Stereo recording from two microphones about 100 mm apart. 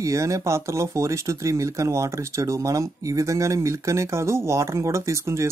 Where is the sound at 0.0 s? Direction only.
30° right (ahead or behind).